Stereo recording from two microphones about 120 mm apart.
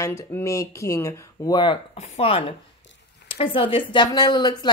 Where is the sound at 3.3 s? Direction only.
50° left (ahead or behind).